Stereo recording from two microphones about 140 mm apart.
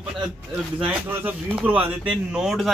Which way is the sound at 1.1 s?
15° right (ahead or behind).